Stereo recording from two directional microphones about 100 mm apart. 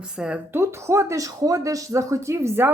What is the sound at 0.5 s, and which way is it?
A woman's voice, 25° right (ahead or behind).